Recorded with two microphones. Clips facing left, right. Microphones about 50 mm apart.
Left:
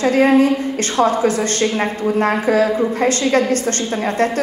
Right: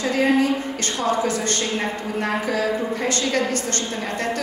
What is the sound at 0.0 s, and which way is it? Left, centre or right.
A woman's voice, left.